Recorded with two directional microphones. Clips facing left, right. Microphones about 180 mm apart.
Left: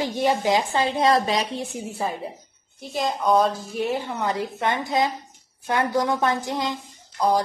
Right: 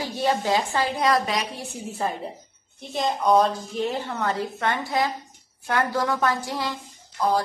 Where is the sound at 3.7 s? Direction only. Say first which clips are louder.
Left 1 dB; 15° left (ahead or behind).